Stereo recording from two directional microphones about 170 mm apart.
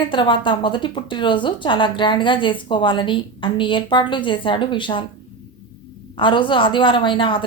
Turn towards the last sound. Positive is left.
turn(degrees=30)  # may be behind; listen again after turning